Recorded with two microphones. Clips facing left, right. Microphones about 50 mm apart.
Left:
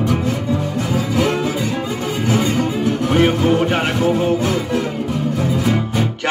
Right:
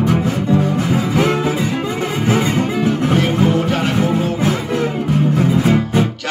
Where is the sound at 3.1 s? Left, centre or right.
Left.